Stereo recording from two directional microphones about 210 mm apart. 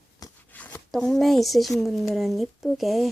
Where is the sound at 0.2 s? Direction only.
10° left (ahead or behind).